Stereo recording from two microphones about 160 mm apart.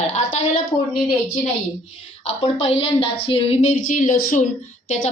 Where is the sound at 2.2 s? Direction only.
40° left (ahead or behind).